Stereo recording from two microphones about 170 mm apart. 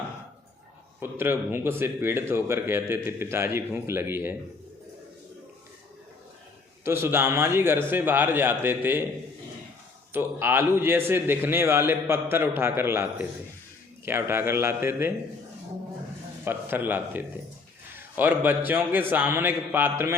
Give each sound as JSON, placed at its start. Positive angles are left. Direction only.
{"t": 0.9, "sound": "speech", "side_deg": -10}
{"t": 6.8, "sound": "speech", "side_deg": -15}
{"t": 10.1, "sound": "speech", "side_deg": -10}
{"t": 16.4, "sound": "speech", "side_deg": -15}